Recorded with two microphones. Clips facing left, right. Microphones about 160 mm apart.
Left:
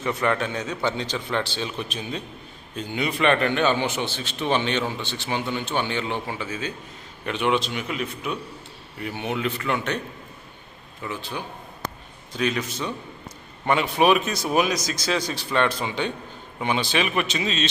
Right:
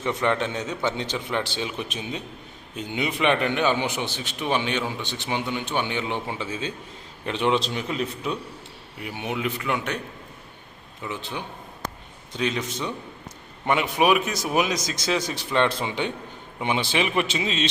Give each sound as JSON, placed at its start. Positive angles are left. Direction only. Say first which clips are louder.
{"t": 0.0, "sound": "a man's voice", "louder": "even", "side_deg": -20}
{"t": 9.0, "sound": "a man's voice", "louder": "left 2 dB", "side_deg": -15}
{"t": 11.0, "sound": "a man's voice", "louder": "left 1 dB", "side_deg": -20}